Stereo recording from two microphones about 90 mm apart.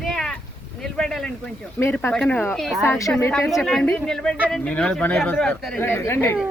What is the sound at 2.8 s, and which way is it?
Speech, 35° left (ahead or behind).